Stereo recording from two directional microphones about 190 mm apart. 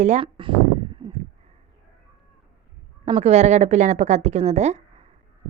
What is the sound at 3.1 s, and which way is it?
A woman's voice, 35° right (ahead or behind).